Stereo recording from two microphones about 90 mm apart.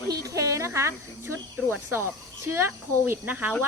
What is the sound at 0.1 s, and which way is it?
Cricket, 35° right (ahead or behind).